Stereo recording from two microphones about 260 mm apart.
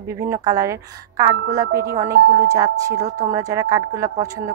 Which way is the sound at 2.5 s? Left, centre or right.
Centre.